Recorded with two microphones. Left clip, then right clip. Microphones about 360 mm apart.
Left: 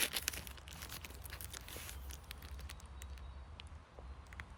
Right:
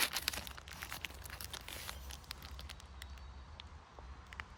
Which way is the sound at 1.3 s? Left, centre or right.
Centre.